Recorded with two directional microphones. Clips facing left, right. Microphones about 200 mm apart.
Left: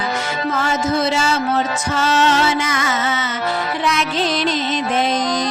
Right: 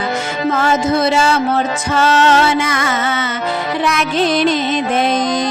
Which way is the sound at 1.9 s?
55° right (ahead or behind).